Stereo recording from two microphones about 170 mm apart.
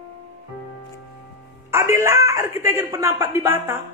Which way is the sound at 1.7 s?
15° right (ahead or behind).